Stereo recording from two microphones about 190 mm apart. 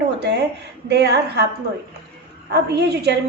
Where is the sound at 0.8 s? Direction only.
60° right (ahead or behind).